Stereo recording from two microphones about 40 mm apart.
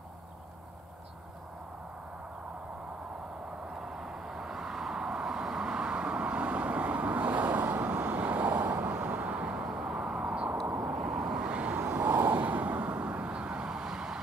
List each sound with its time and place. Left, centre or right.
3.8 s vehicle: centre; by 8.7 s right
8.7 s vehicle: right
9.0 s vehicle: right; by 9.9 s centre
10.1 s vehicle: right
11.9 s vehicle: right; by 14.2 s centre